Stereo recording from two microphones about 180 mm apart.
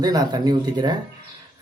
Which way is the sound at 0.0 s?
20° right (ahead or behind).